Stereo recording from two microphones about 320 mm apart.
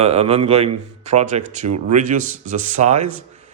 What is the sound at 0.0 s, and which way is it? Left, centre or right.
Speech, centre.